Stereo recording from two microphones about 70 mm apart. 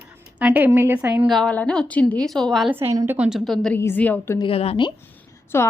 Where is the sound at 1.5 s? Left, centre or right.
Centre.